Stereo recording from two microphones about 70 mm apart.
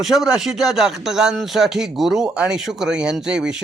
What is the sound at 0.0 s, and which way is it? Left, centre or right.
Speech, centre.